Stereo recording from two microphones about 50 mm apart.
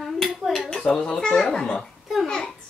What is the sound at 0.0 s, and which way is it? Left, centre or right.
Dishes, centre.